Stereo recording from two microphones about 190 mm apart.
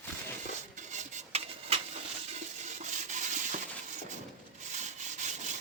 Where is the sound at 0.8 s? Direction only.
40° right (ahead or behind).